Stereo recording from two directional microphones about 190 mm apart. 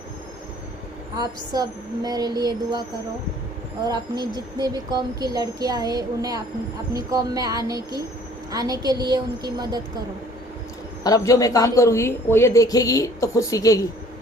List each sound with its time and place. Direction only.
1.2 s speech: 20° right (ahead or behind)
3.8 s speech: 20° right (ahead or behind)
11.0 s speech: 20° left (ahead or behind)